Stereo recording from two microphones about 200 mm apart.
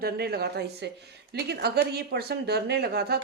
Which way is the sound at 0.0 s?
50° right (ahead or behind).